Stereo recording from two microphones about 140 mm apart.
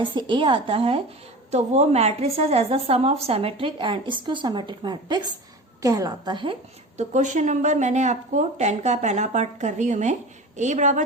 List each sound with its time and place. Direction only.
0.0 s a woman's voice: 35° right (ahead or behind)
1.5 s a woman's voice: 55° right (ahead or behind); by 6.6 s 35° right (ahead or behind)
6.9 s speech: 60° right (ahead or behind)